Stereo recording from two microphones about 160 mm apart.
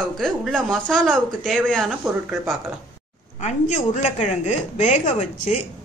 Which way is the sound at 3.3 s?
45° left (ahead or behind).